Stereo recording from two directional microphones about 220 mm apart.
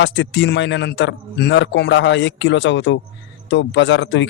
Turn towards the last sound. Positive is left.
turn(degrees=55)  # may be behind; listen again after turning